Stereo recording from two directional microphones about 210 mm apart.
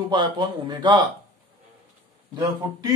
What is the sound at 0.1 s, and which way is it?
Speech, 20° right (ahead or behind).